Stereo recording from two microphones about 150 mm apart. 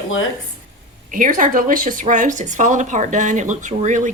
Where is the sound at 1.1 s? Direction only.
65° right (ahead or behind).